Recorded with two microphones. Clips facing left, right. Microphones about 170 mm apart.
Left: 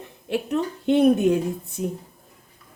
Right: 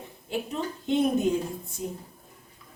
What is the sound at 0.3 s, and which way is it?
A woman's voice, 70° left (ahead or behind).